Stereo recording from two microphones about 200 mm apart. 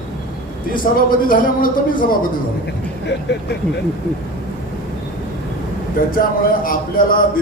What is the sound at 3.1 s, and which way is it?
Speech, 55° left (ahead or behind).